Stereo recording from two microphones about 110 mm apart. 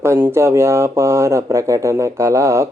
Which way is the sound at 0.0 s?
20° right (ahead or behind).